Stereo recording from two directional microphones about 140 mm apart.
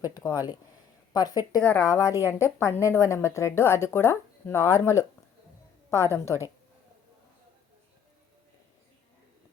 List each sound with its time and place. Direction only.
0.2 s a woman's voice: 30° left (ahead or behind)